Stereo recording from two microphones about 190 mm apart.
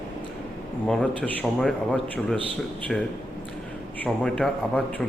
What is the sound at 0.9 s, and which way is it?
A man's voice, 5° left (ahead or behind).